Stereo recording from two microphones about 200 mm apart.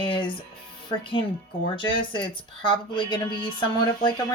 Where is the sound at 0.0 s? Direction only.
25° left (ahead or behind).